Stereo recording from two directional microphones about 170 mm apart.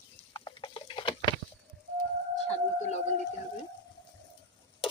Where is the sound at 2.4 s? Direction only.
40° left (ahead or behind).